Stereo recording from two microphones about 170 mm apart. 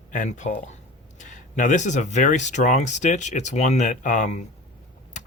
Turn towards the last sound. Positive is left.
turn(degrees=45)  # may be behind; listen again after turning